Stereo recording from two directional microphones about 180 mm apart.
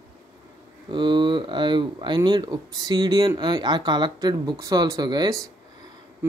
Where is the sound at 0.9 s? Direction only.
25° right (ahead or behind).